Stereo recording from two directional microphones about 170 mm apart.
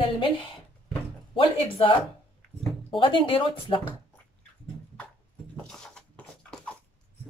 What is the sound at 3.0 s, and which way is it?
Speech, 30° left (ahead or behind).